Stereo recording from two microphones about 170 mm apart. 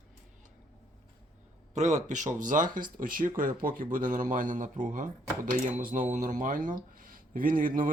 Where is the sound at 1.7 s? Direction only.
45° right (ahead or behind).